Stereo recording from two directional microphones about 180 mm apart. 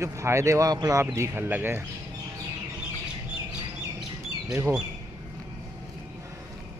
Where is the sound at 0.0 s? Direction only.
15° right (ahead or behind).